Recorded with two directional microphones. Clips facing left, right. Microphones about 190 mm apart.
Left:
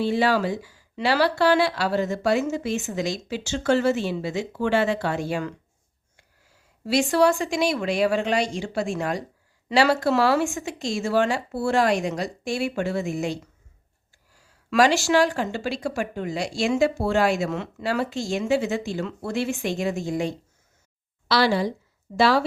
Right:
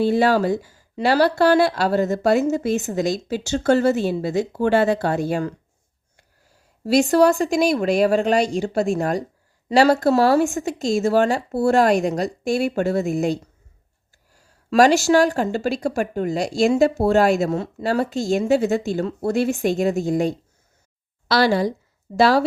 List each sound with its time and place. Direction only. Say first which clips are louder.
0.0 s speech: right 4 dB; 45° right (ahead or behind)
6.8 s speech: right 4 dB; 40° right (ahead or behind)